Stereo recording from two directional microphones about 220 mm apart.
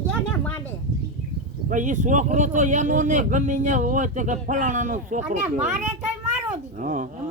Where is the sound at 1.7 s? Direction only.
35° right (ahead or behind).